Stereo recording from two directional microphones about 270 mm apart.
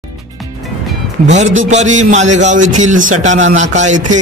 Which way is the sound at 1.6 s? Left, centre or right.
Right.